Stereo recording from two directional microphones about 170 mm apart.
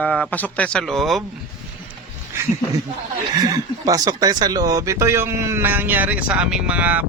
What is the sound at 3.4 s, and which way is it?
Speech, 20° right (ahead or behind).